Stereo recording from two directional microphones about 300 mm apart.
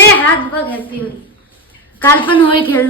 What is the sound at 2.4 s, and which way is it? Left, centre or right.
Speech, centre.